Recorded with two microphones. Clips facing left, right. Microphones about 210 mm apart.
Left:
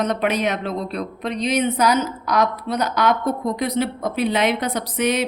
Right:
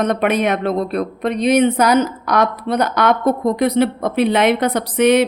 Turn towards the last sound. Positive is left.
turn(degrees=-60)  # may be behind; listen again after turning